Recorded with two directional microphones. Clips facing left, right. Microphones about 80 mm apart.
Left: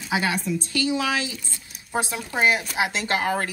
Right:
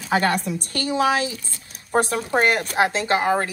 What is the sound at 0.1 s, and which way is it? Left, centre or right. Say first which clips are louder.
Speech: right 4 dB; right.